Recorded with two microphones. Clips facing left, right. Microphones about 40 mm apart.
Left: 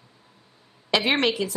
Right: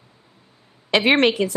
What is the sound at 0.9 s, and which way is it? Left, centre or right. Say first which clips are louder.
Speech: right 5 dB; right.